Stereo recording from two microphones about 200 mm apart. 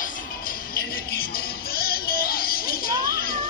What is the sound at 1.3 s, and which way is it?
Music, 50° left (ahead or behind).